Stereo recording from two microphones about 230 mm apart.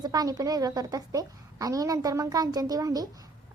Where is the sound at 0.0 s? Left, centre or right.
Centre.